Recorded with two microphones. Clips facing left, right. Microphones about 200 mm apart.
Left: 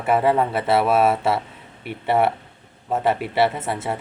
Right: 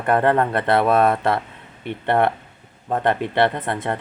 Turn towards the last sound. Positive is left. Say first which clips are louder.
# right 1 dB
turn(degrees=5)  # may be behind; listen again after turning